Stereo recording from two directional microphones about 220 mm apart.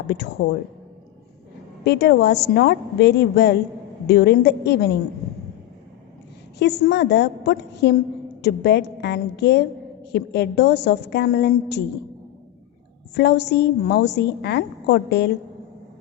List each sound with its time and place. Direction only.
1.8 s a woman's voice: 50° left (ahead or behind)
6.6 s a woman's voice: 50° left (ahead or behind)
13.1 s a woman's voice: 50° left (ahead or behind)